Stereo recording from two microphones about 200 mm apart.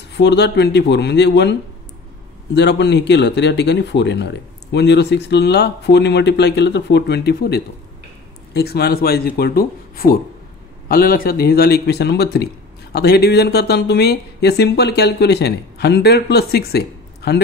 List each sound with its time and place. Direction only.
0.1 s speech: 60° left (ahead or behind)